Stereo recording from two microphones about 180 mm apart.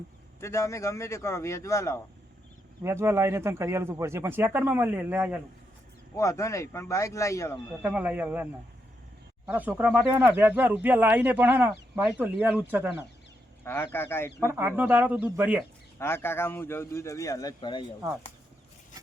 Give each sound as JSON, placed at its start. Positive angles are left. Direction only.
{"t": 0.3, "sound": "a man's voice", "side_deg": 15}
{"t": 2.8, "sound": "speech", "side_deg": -15}
{"t": 6.1, "sound": "a man's voice", "side_deg": 15}
{"t": 7.8, "sound": "speech", "side_deg": -10}
{"t": 9.5, "sound": "speech", "side_deg": -10}
{"t": 13.7, "sound": "a man's voice", "side_deg": 10}
{"t": 14.3, "sound": "speech", "side_deg": -15}
{"t": 16.0, "sound": "a man's voice", "side_deg": 15}